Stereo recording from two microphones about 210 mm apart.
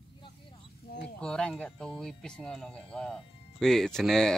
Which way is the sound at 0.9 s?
50° left (ahead or behind).